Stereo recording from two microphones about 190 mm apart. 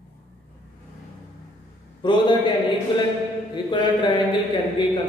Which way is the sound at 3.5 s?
25° left (ahead or behind).